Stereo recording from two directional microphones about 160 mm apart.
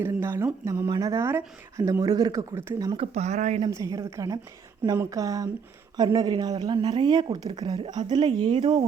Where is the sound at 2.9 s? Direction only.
40° right (ahead or behind).